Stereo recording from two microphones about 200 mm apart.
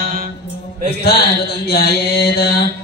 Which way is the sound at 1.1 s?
50° left (ahead or behind).